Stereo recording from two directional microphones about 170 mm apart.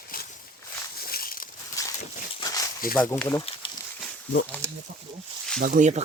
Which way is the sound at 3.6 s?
30° left (ahead or behind).